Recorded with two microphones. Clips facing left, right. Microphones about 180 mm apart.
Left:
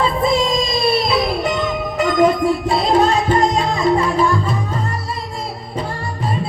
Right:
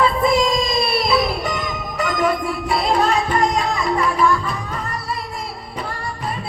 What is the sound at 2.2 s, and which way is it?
Music, 25° left (ahead or behind).